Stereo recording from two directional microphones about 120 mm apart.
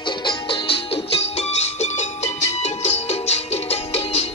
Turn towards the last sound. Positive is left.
turn(degrees=65)  # may be behind; listen again after turning